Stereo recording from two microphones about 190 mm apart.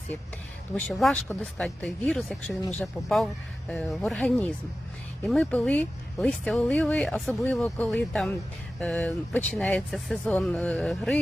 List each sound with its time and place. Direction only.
0.9 s speech: centre (ahead or behind)